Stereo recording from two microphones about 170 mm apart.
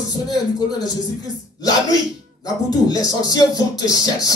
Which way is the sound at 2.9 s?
25° left (ahead or behind).